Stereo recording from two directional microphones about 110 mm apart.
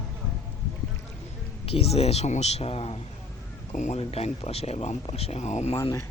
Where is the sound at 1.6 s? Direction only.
65° left (ahead or behind).